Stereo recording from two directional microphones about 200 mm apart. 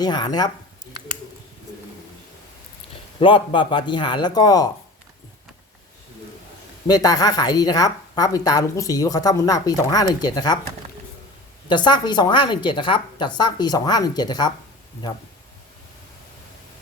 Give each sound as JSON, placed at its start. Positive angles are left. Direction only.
{"t": 0.0, "sound": "a woman's voice", "side_deg": 20}
{"t": 3.2, "sound": "a woman's voice", "side_deg": 25}
{"t": 6.8, "sound": "a woman's voice", "side_deg": 20}
{"t": 11.7, "sound": "a woman's voice", "side_deg": 20}